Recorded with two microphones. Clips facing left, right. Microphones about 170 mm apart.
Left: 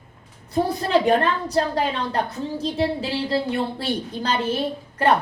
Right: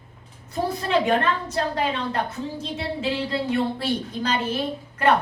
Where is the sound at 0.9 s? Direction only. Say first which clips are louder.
Left 2 dB; 35° left (ahead or behind).